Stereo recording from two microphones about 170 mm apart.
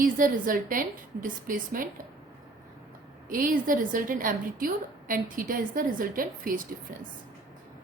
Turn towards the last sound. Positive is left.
turn(degrees=-55)  # may be behind; listen again after turning